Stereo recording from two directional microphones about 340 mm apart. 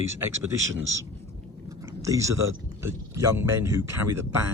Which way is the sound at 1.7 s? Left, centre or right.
Centre.